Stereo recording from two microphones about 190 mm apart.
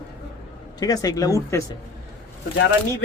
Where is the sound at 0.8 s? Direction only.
20° left (ahead or behind).